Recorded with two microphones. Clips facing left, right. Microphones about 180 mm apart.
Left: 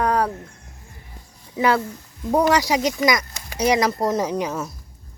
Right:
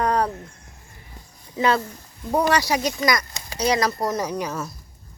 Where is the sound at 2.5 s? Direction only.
15° left (ahead or behind).